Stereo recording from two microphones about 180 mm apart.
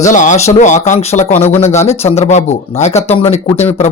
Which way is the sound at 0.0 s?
45° left (ahead or behind).